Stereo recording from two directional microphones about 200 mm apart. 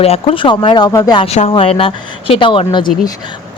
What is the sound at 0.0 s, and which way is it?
Speech, 30° left (ahead or behind).